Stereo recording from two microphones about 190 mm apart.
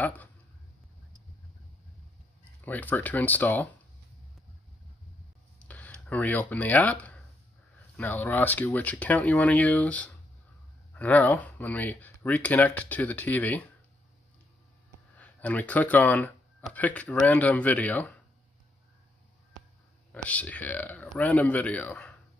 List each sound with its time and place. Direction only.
0.0 s speech: 10° left (ahead or behind)
2.6 s speech: 10° left (ahead or behind)
5.6 s speech: 5° left (ahead or behind)
15.1 s speech: 10° left (ahead or behind)
20.1 s speech: 5° left (ahead or behind)